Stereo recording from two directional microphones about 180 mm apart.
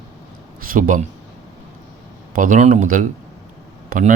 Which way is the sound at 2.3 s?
50° right (ahead or behind).